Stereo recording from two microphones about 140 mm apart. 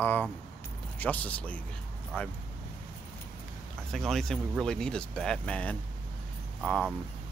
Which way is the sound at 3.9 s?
5° left (ahead or behind).